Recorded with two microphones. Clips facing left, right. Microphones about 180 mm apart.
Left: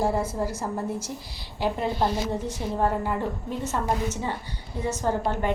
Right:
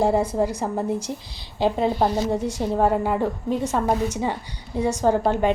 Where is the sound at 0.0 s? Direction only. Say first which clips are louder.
Right 5 dB; 15° right (ahead or behind).